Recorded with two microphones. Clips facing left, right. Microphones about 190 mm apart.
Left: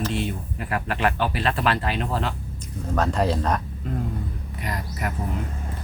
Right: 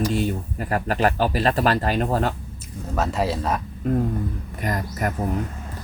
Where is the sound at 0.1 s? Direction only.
40° right (ahead or behind).